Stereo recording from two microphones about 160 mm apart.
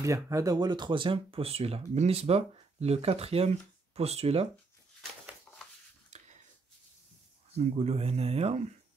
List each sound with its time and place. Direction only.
0.0 s speech: 20° right (ahead or behind); by 4.5 s 40° right (ahead or behind)
6.1 s a sound: 45° right (ahead or behind)
7.5 s speech: 40° right (ahead or behind)